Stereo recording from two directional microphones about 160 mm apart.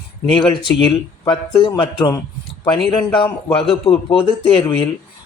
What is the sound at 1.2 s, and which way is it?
A man's voice, 30° left (ahead or behind).